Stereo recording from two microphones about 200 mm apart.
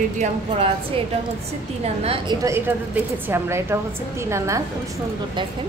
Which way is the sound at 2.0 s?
30° right (ahead or behind).